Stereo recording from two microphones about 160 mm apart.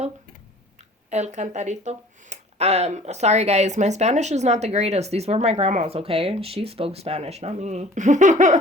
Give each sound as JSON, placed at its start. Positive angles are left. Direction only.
{"t": 1.1, "sound": "speech", "side_deg": -45}